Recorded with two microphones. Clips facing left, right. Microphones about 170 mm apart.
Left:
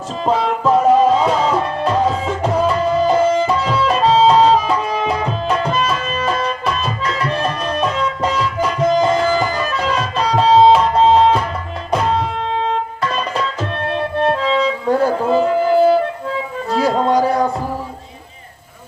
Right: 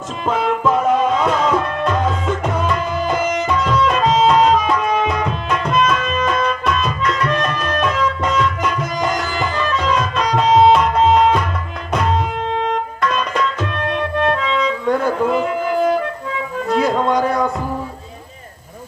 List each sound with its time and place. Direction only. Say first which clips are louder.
0.3 s music: left 2 dB; 30° left (ahead or behind)
10.8 s tabla: left 1 dB; 30° left (ahead or behind)
11.9 s music: left 1 dB; 30° left (ahead or behind)